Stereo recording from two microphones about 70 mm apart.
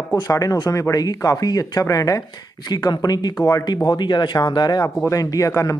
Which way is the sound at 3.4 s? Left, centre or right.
Left.